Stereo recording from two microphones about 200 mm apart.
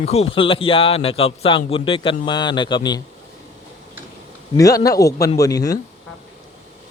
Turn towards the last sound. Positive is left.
turn(degrees=20)  # may be behind; listen again after turning